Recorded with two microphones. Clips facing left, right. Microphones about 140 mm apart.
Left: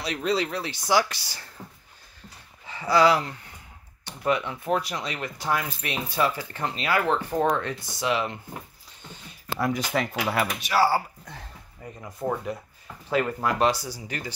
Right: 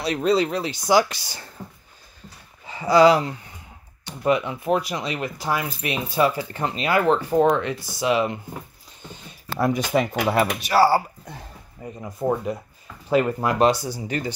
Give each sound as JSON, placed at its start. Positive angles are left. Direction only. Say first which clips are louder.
{"t": 0.1, "sound": "speech", "louder": "right 6 dB", "side_deg": -35}
{"t": 0.4, "sound": "speech", "louder": "right 6 dB", "side_deg": -20}
{"t": 2.7, "sound": "speech", "louder": "right 5 dB", "side_deg": -15}
{"t": 9.7, "sound": "speech", "louder": "right 6 dB", "side_deg": -20}
{"t": 11.2, "sound": "speech", "louder": "right 3 dB", "side_deg": -15}